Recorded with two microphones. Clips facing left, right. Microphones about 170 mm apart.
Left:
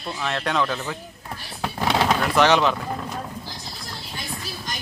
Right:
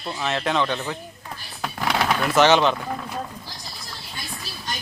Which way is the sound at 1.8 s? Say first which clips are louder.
Left 2 dB; 25° left (ahead or behind).